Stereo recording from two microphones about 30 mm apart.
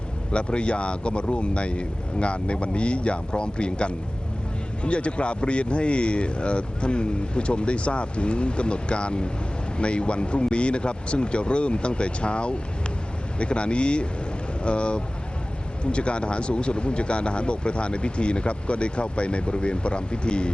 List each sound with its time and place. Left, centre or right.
0.3 s speech: left